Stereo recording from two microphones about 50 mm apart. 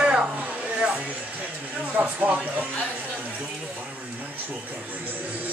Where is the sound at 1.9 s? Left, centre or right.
Right.